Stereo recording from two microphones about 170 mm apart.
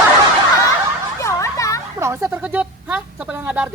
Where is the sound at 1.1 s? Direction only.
15° left (ahead or behind).